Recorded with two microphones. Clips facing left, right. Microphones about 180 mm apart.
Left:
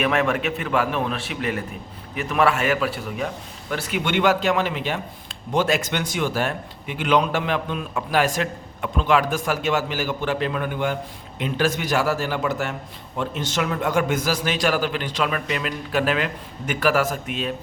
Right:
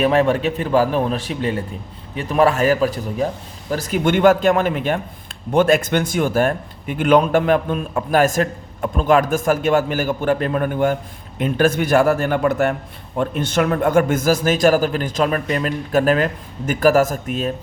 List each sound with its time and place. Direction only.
0.0 s a man's voice: 30° right (ahead or behind)